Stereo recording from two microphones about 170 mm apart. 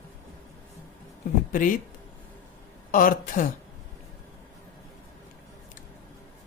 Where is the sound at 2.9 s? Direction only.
55° left (ahead or behind).